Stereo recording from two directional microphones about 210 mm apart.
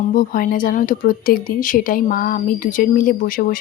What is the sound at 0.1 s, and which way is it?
Speech, 40° left (ahead or behind).